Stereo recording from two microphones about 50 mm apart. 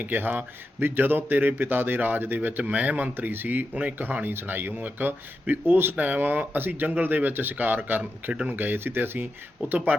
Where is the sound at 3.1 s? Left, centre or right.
Right.